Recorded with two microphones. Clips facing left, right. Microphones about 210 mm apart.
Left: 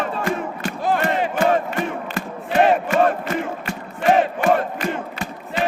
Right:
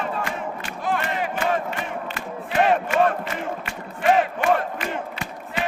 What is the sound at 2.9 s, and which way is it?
Crowd, 40° left (ahead or behind).